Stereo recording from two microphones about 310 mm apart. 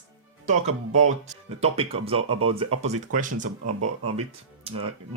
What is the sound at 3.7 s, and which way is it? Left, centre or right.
Speech, right.